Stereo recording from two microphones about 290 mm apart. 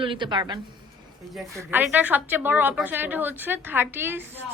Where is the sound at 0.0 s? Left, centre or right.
Centre.